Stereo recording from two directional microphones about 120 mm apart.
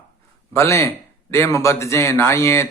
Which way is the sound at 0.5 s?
25° left (ahead or behind).